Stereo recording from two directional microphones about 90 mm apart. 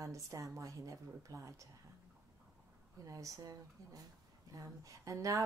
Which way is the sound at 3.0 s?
40° right (ahead or behind).